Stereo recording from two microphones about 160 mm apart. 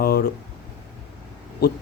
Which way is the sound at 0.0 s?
70° left (ahead or behind).